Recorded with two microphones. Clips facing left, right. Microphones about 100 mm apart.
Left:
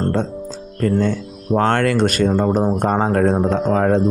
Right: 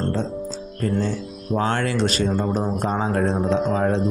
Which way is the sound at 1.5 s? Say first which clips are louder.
Left 6 dB; 60° left (ahead or behind).